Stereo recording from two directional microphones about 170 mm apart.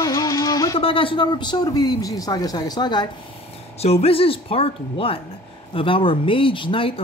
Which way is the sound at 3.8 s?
35° left (ahead or behind).